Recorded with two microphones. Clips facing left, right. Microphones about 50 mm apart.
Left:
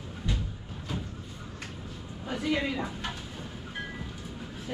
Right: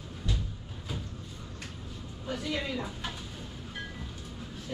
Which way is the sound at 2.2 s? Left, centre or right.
Centre.